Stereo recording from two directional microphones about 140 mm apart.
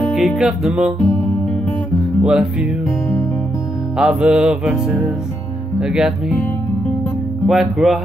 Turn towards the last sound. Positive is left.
turn(degrees=0)  # may be behind; listen again after turning